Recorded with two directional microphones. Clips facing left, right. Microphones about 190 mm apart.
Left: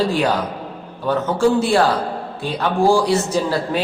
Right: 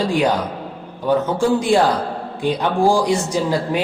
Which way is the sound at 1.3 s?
15° right (ahead or behind).